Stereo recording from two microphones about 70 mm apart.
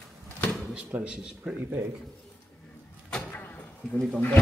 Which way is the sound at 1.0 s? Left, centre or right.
Centre.